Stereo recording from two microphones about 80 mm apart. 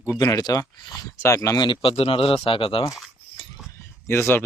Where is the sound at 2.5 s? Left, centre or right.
Left.